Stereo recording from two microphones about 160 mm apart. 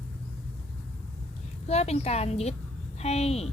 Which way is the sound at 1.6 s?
40° left (ahead or behind).